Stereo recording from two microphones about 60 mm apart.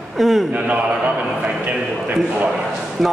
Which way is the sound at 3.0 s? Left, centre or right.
Centre.